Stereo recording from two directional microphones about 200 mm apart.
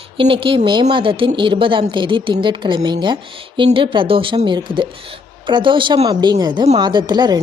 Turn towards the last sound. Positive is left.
turn(degrees=-20)  # may be behind; listen again after turning